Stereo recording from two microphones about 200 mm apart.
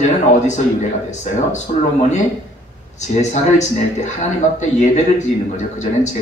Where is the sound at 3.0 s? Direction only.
35° left (ahead or behind).